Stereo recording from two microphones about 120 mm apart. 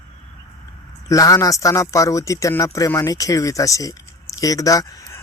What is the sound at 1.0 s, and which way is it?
Speech, 30° left (ahead or behind).